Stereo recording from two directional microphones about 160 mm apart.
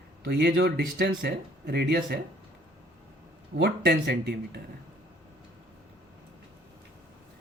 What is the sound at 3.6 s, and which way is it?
Speech, 90° right.